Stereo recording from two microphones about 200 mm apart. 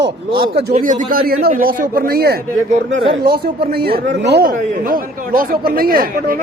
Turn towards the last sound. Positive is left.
turn(degrees=-45)  # may be behind; listen again after turning